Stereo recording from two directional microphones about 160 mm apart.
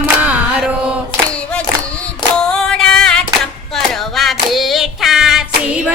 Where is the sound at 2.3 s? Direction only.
5° left (ahead or behind).